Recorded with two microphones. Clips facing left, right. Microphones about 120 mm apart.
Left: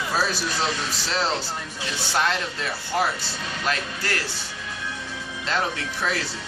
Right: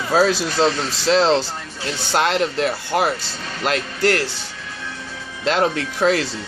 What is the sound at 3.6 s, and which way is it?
Music, 70° right (ahead or behind).